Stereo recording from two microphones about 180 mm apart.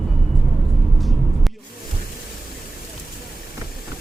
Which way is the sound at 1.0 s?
Centre (ahead or behind).